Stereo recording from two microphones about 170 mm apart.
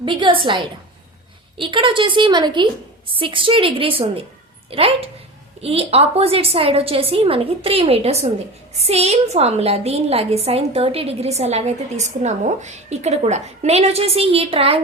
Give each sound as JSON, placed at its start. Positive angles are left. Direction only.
{"t": 0.0, "sound": "a woman's voice", "side_deg": -30}